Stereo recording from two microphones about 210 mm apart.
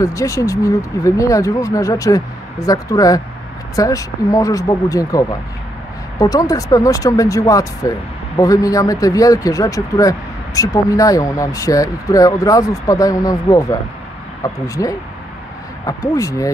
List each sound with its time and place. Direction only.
0.0 s a man's voice: 15° left (ahead or behind)